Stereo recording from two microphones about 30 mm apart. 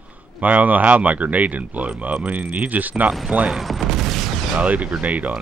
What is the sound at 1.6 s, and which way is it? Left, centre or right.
Speech, right.